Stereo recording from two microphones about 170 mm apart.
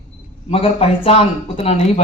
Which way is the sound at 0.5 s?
35° left (ahead or behind).